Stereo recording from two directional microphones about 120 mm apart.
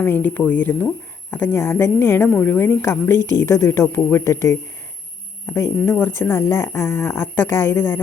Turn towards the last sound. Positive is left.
turn(degrees=20)  # may be behind; listen again after turning